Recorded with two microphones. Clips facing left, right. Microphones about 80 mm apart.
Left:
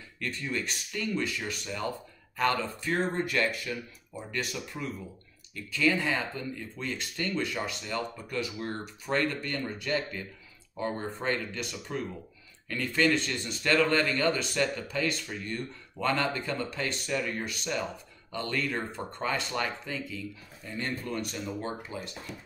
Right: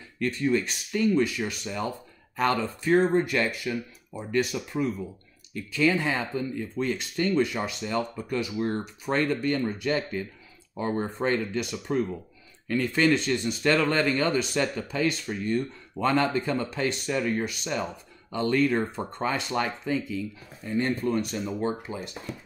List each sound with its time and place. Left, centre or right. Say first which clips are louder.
0.2 s speech: right 9 dB; right